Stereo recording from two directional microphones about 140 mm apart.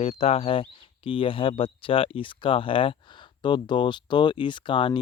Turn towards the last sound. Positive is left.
turn(degrees=35)  # may be behind; listen again after turning